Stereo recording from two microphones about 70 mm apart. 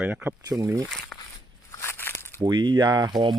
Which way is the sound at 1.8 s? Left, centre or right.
Left.